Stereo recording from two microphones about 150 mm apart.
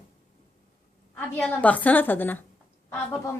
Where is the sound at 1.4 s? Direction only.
10° left (ahead or behind).